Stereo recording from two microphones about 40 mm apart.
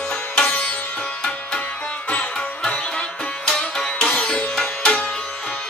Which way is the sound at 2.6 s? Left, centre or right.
Left.